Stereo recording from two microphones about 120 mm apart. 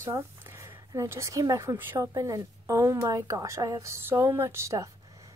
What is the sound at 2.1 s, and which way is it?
Speech, 25° right (ahead or behind).